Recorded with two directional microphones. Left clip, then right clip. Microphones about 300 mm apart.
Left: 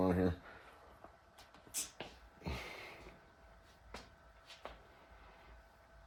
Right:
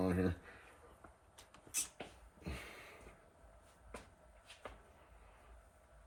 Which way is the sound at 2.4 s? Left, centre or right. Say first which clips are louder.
Left 4 dB; left.